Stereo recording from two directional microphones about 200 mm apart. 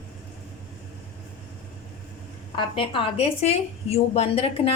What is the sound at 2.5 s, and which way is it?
A woman's voice, 25° left (ahead or behind).